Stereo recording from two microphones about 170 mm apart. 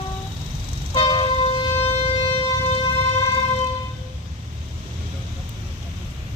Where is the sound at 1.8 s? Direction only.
35° left (ahead or behind).